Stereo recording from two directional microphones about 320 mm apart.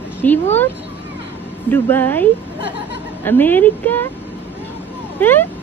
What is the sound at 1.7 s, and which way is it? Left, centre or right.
A woman's voice, centre.